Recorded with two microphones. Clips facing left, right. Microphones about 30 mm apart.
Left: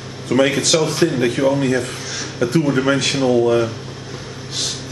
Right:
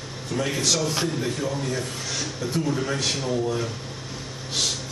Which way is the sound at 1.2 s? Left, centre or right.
Left.